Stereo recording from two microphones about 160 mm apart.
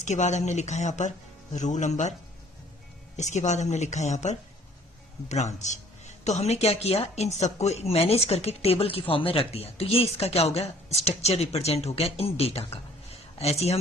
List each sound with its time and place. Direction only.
0.0 s a woman's voice: 45° left (ahead or behind)
3.2 s a woman's voice: 45° left (ahead or behind)